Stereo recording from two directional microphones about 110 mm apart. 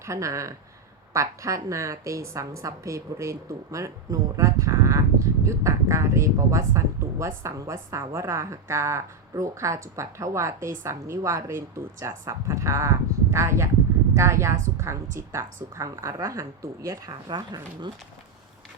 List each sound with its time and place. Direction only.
0.0 s a woman's voice: 30° right (ahead or behind)